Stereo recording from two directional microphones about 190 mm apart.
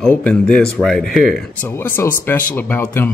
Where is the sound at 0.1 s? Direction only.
5° left (ahead or behind).